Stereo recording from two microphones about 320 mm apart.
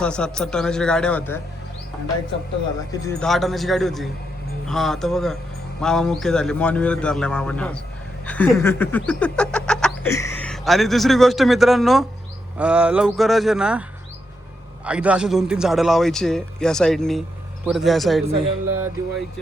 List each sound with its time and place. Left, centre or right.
0.0 s a man's voice: centre
2.9 s a man's voice: centre
8.3 s a sound: centre
12.5 s a man's voice: centre
14.8 s a man's voice: centre
18.3 s speech: centre
18.6 s music: right